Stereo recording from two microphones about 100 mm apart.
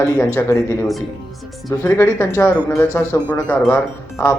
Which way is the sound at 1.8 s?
25° left (ahead or behind).